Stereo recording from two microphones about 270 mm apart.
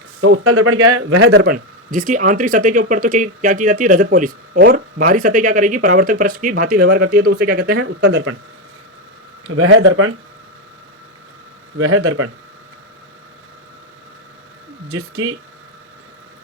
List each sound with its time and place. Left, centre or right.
0.2 s a man's voice: right
9.5 s speech: right
11.8 s speech: right
14.8 s speech: right